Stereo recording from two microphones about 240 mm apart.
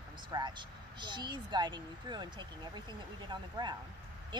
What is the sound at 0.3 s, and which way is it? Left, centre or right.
Speech, centre.